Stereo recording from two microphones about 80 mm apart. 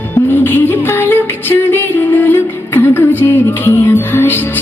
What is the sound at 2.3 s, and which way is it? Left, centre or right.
Music, left.